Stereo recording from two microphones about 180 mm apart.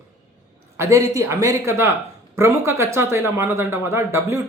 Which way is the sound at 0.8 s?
15° right (ahead or behind).